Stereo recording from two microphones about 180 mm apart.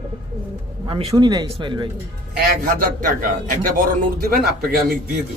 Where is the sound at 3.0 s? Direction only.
50° right (ahead or behind).